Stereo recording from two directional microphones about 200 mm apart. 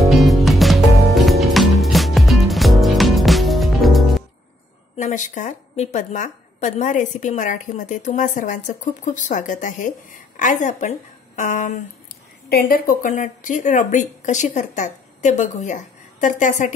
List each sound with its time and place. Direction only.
0.0 s music: centre (ahead or behind)
4.9 s a woman's voice: 35° left (ahead or behind)